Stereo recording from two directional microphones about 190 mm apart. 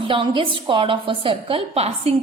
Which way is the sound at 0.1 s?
25° right (ahead or behind).